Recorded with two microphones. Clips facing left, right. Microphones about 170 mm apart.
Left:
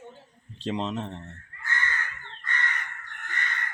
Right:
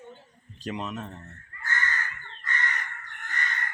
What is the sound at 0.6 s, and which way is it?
Speech, 25° left (ahead or behind).